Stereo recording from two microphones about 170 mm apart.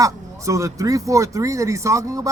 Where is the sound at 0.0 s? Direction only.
20° right (ahead or behind).